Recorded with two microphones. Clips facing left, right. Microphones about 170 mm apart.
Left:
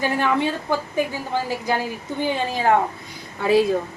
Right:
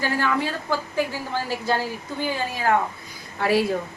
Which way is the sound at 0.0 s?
20° left (ahead or behind).